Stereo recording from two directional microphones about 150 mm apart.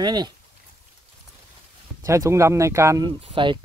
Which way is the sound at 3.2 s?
35° right (ahead or behind).